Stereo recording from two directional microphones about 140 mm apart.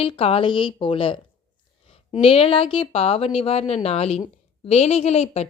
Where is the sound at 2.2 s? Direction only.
40° left (ahead or behind).